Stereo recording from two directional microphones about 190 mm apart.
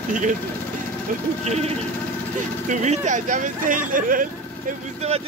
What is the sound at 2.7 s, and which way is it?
Speech, 40° right (ahead or behind).